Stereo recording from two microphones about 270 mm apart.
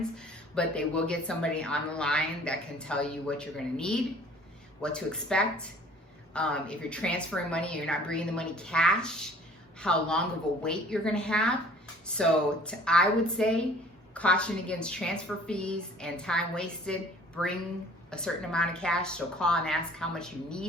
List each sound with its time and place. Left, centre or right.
0.3 s speech: centre